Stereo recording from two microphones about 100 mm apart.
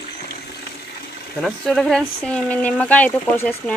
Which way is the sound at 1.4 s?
Centre (ahead or behind).